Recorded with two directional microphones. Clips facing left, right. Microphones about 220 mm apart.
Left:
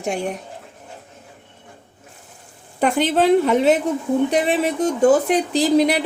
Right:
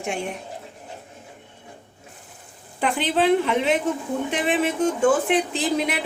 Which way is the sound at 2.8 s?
45° left (ahead or behind).